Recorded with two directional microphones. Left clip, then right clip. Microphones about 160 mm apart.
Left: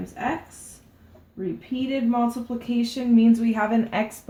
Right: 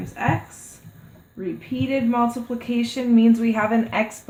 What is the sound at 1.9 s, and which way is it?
A woman's voice, 15° right (ahead or behind).